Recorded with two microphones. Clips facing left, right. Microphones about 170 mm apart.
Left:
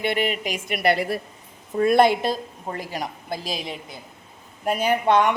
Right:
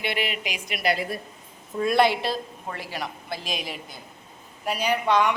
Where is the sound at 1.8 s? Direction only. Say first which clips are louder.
Left 4 dB; 50° left (ahead or behind); by 3.8 s 30° left (ahead or behind).